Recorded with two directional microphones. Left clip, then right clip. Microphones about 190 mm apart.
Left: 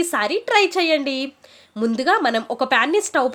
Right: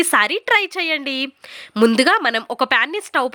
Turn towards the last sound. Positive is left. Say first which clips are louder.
# left 2 dB
turn(degrees=-25)  # may be behind; listen again after turning